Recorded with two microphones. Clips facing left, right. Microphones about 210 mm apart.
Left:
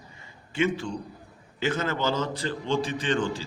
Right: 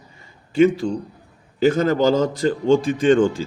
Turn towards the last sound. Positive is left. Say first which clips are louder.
# right 11 dB
turn(degrees=-50)  # may be behind; listen again after turning